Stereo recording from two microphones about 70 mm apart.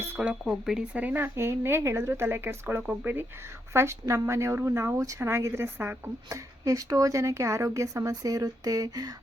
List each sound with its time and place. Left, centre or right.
0.2 s speech: centre
0.5 s speech: centre
0.9 s a woman's voice: right
2.8 s speech: centre
3.7 s a woman's voice: right
6.2 s speech: right